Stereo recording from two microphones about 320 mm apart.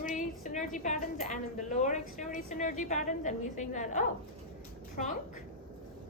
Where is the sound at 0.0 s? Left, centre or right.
Left.